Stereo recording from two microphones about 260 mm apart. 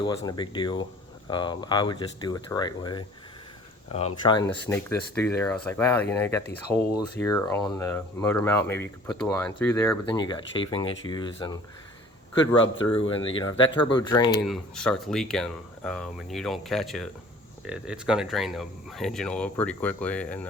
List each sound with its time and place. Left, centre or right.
0.3 s speech: centre
12.3 s speech: centre
14.4 s speech: centre